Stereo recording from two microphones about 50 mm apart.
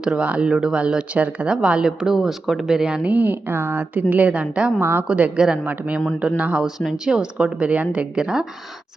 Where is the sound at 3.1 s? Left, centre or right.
Right.